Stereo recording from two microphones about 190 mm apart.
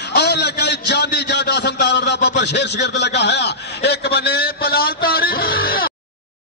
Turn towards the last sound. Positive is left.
turn(degrees=50)  # may be behind; listen again after turning